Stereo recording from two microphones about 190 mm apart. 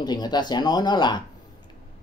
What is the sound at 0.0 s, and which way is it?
Speech, 20° left (ahead or behind).